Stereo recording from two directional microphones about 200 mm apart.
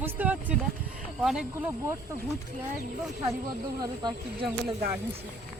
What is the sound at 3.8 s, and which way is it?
Speech, 20° right (ahead or behind).